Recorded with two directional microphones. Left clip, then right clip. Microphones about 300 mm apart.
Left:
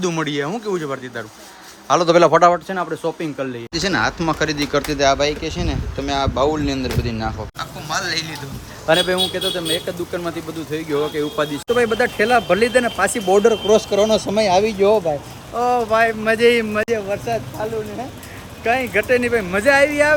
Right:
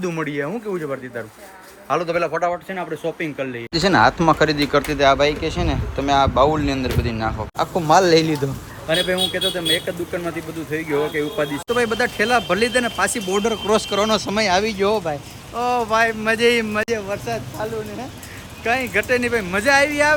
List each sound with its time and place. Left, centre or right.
0.0 s speech: centre
1.9 s a man's voice: centre
2.6 s speech: centre
7.5 s speech: centre
9.0 s speech: centre